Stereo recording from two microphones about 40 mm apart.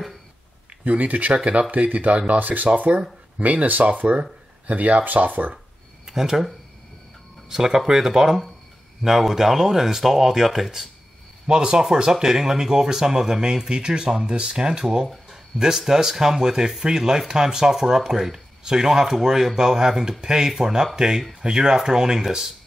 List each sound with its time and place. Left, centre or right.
0.8 s speech: right
1.3 s speech: right
6.0 s speech: centre
11.4 s speech: centre